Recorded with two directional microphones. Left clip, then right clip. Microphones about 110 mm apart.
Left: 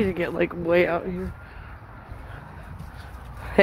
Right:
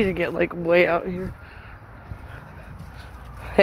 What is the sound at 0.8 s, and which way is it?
Speech, 5° left (ahead or behind).